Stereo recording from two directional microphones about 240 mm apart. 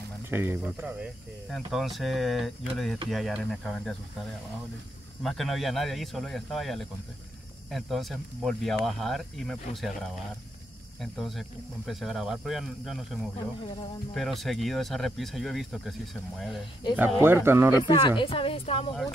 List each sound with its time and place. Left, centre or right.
0.3 s speech: centre
5.2 s speech: centre
16.9 s speech: centre
17.8 s a woman's voice: centre